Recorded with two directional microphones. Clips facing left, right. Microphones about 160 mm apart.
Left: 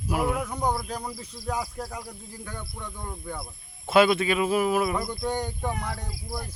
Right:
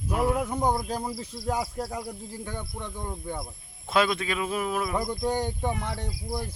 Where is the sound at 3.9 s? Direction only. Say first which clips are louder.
Left 5 dB; 5° left (ahead or behind).